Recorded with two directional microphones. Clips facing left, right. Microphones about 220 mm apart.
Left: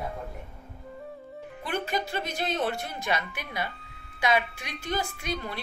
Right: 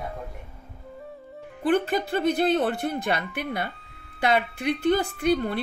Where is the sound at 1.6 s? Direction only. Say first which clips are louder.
Right 8 dB; 55° right (ahead or behind).